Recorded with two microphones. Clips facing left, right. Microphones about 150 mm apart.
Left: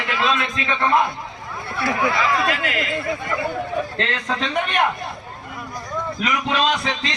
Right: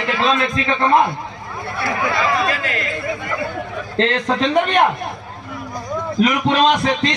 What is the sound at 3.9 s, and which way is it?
Speech, 35° right (ahead or behind).